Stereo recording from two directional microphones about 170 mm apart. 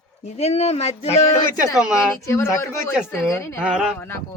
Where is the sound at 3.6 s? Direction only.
5° right (ahead or behind).